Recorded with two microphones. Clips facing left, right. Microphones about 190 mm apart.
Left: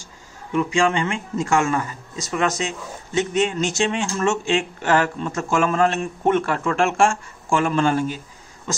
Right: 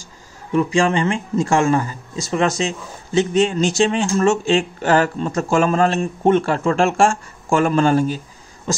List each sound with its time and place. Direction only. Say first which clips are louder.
0.5 s speech: right 3 dB; 35° right (ahead or behind)